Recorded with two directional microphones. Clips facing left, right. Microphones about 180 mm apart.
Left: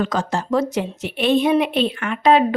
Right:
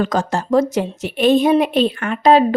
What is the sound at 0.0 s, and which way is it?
A woman's voice, 45° right (ahead or behind).